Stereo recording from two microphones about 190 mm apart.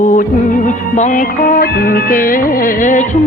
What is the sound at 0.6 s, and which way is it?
Music, 40° left (ahead or behind).